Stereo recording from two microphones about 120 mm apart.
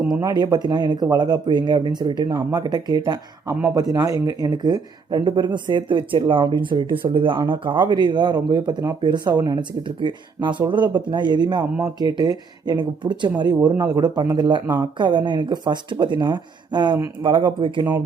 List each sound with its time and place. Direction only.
0.2 s speech: 35° right (ahead or behind)